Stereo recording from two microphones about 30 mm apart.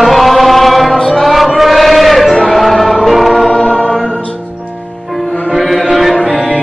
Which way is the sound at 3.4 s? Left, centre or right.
Centre.